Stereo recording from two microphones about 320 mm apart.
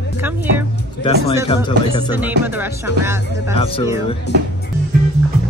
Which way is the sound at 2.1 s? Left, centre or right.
Centre.